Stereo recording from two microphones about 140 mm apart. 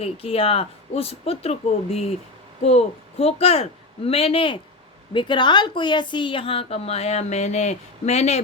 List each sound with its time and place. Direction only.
0.0 s a woman's voice: 45° left (ahead or behind)